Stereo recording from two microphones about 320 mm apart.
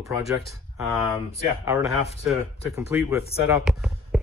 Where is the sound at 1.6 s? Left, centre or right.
Centre.